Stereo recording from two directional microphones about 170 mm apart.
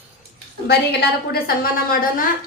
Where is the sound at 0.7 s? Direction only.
70° left (ahead or behind); by 2.2 s 55° left (ahead or behind).